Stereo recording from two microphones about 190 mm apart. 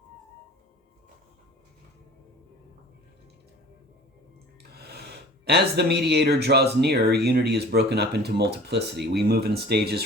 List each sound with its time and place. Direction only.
4.7 s speech: 55° right (ahead or behind)